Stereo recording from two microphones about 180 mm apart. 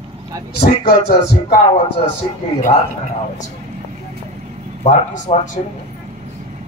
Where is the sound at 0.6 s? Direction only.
60° left (ahead or behind).